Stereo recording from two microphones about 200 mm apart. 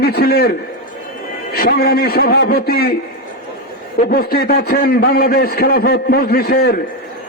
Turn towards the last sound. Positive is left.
turn(degrees=50)  # may be behind; listen again after turning